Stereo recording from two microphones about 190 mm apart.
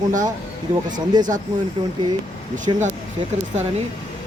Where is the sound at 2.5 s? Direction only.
40° right (ahead or behind).